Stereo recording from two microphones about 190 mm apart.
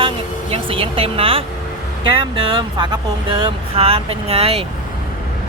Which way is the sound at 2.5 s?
25° right (ahead or behind).